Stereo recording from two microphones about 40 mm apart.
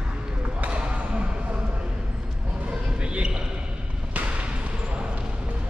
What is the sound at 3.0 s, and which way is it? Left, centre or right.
Basketball bounce, right.